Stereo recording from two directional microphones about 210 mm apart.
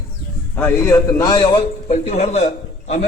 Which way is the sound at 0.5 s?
10° left (ahead or behind).